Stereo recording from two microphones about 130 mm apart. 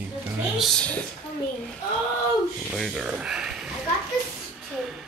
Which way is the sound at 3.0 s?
5° right (ahead or behind).